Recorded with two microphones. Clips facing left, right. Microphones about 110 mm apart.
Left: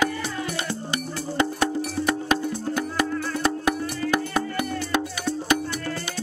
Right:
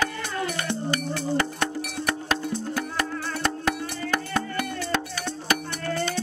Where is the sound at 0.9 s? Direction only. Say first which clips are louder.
Left 2 dB; 20° left (ahead or behind).